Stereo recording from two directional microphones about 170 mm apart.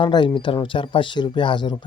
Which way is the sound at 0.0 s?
30° left (ahead or behind).